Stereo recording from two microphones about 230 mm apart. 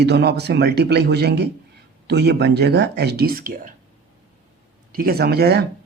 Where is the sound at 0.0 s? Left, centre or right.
Right.